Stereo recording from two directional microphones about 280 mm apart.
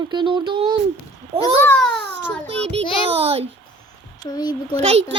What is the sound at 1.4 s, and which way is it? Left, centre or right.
Speech, centre.